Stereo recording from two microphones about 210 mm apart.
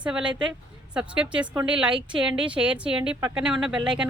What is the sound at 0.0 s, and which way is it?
A woman's voice, 5° right (ahead or behind).